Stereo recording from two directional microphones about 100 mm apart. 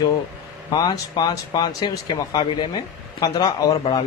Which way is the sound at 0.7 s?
45° left (ahead or behind).